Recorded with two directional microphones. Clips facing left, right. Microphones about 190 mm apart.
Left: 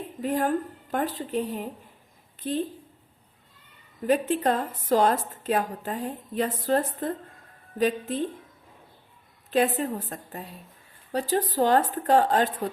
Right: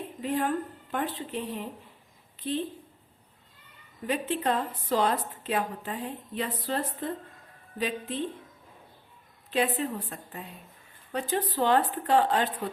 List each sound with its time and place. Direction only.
0.2 s a woman's voice: 45° left (ahead or behind)
4.0 s a woman's voice: 45° left (ahead or behind)
9.5 s a woman's voice: 45° left (ahead or behind)